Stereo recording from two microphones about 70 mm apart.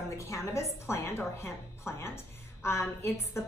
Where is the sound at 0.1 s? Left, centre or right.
Left.